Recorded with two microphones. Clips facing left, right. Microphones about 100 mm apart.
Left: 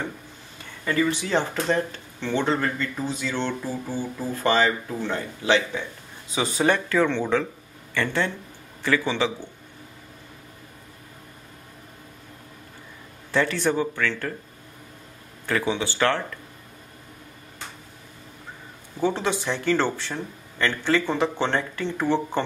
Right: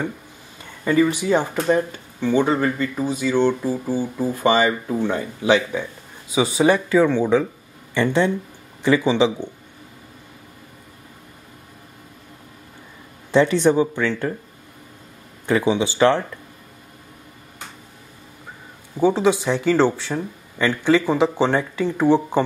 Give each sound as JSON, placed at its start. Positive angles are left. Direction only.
{"t": 0.8, "sound": "speech", "side_deg": -15}
{"t": 13.3, "sound": "speech", "side_deg": -20}
{"t": 15.4, "sound": "speech", "side_deg": -15}
{"t": 18.9, "sound": "speech", "side_deg": -10}